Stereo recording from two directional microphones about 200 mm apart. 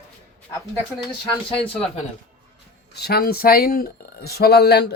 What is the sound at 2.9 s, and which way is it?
Speech, 55° left (ahead or behind).